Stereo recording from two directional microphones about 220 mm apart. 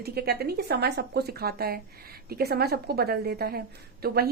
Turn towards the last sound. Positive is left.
turn(degrees=-45)  # may be behind; listen again after turning